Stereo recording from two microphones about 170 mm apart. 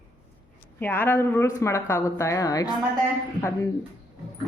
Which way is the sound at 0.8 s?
10° left (ahead or behind).